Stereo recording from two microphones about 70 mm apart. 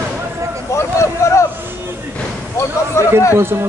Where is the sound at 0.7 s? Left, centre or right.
Left.